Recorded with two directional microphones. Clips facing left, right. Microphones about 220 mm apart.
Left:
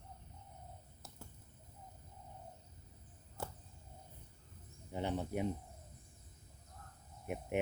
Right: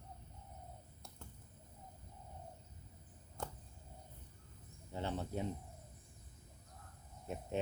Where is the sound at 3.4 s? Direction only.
5° left (ahead or behind).